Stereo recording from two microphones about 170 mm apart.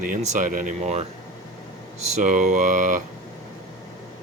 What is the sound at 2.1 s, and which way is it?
Speech, 45° right (ahead or behind).